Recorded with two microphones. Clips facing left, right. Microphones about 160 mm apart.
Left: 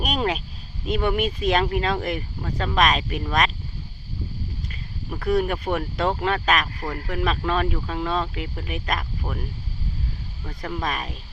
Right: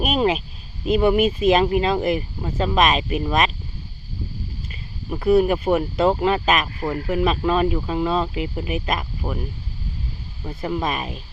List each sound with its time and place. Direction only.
0.0 s a sound: 5° right (ahead or behind)
0.9 s speech: 5° right (ahead or behind)
5.1 s speech: 5° right (ahead or behind)
10.4 s speech: 25° right (ahead or behind)
10.7 s speech: 5° right (ahead or behind)